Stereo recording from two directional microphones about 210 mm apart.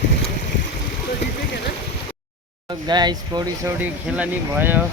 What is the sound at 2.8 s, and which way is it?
Speech, 20° right (ahead or behind).